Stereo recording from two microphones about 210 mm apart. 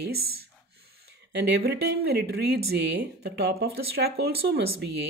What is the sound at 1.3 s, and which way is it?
Speech, 50° right (ahead or behind).